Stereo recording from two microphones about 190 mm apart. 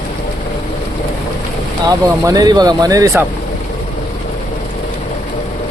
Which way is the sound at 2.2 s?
20° right (ahead or behind).